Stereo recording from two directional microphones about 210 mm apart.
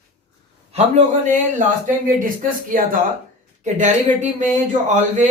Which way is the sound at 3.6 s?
35° right (ahead or behind).